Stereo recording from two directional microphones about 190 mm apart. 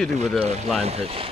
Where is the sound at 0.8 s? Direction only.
35° right (ahead or behind).